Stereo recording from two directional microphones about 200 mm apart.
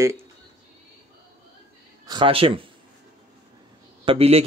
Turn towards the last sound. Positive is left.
turn(degrees=-30)  # may be behind; listen again after turning